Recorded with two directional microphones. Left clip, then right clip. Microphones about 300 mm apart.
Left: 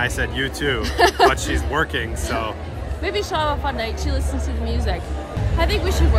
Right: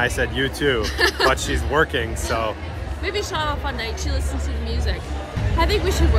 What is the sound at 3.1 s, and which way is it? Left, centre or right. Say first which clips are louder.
Speech: left 2 dB; centre.